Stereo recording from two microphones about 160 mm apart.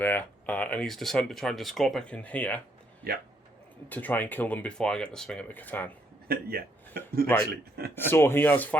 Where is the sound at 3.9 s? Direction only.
10° left (ahead or behind).